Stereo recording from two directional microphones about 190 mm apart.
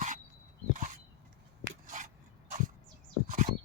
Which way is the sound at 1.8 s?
40° right (ahead or behind).